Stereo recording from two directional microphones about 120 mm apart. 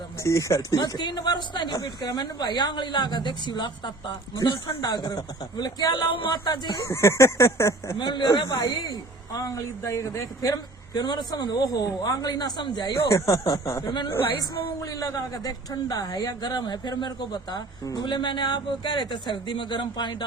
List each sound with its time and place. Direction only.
0.2 s a man's voice: 25° left (ahead or behind)
7.9 s a man's voice: 40° left (ahead or behind)
13.8 s a man's voice: 40° left (ahead or behind)
14.8 s a man's voice: 30° left (ahead or behind)